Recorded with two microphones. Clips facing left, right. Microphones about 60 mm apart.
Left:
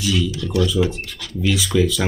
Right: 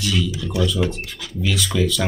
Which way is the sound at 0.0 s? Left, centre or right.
Centre.